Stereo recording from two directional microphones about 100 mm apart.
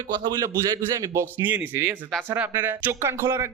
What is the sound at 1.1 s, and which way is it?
A man's voice, 25° right (ahead or behind).